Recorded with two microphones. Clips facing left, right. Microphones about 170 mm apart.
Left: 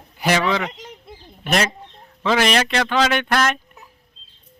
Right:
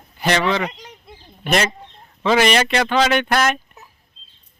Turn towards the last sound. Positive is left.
turn(degrees=-5)  # may be behind; listen again after turning